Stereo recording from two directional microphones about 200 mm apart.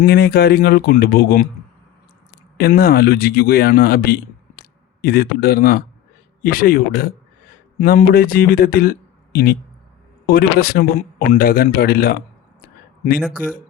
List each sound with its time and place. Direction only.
0.0 s speech: 50° left (ahead or behind)
2.6 s speech: 50° left (ahead or behind)
13.4 s speech: 45° left (ahead or behind)